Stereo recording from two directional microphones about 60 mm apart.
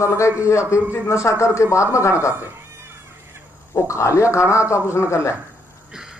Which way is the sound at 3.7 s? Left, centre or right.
Left.